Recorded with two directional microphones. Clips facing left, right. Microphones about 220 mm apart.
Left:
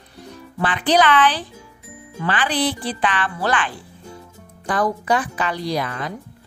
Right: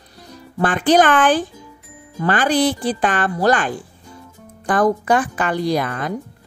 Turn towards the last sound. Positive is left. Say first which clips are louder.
# right 4 dB
turn(degrees=-50)  # may be behind; listen again after turning